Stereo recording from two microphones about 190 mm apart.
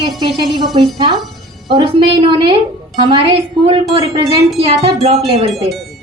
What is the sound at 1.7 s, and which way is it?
A woman's voice, 25° right (ahead or behind).